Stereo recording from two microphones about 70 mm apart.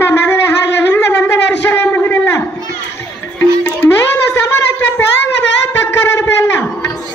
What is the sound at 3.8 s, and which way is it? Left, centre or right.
Music, centre.